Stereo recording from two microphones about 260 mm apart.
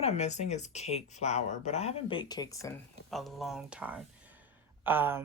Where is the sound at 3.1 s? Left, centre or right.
Centre.